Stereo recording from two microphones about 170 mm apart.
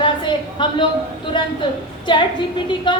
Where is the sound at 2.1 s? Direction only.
30° left (ahead or behind).